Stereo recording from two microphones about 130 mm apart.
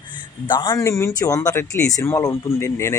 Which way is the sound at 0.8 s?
25° left (ahead or behind).